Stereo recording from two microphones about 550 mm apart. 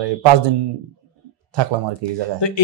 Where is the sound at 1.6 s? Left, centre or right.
Right.